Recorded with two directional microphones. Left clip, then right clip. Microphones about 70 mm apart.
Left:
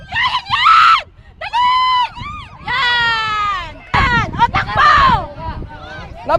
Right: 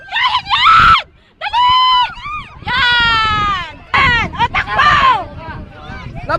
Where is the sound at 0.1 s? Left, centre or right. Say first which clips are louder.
Right 2 dB; centre.